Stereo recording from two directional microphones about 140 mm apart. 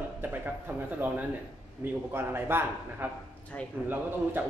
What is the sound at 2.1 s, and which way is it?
Speech, 15° right (ahead or behind).